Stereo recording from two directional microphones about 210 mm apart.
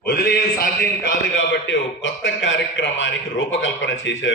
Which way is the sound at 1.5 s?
60° left (ahead or behind).